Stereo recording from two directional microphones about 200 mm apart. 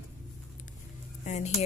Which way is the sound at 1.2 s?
35° left (ahead or behind).